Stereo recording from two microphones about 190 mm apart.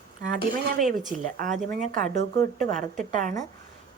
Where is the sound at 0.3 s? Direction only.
45° right (ahead or behind).